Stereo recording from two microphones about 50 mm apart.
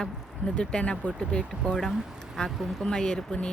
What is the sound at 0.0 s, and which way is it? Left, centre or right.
Speech, centre.